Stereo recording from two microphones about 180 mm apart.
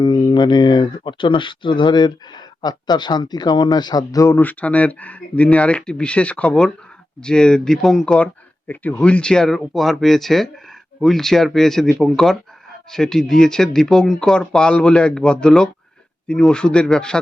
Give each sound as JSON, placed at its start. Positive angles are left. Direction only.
{"t": 0.0, "sound": "speech", "side_deg": 25}